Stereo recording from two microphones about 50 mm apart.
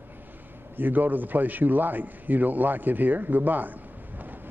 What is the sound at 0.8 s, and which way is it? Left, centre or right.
A man's voice, right.